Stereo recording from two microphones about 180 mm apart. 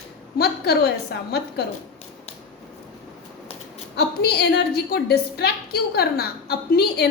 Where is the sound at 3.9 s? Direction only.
65° left (ahead or behind).